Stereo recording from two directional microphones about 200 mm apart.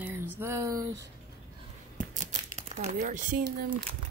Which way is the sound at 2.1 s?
35° right (ahead or behind).